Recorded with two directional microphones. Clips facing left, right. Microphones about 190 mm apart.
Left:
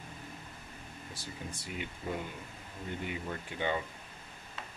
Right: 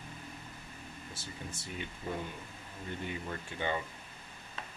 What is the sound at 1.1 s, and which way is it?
Speech, 15° left (ahead or behind).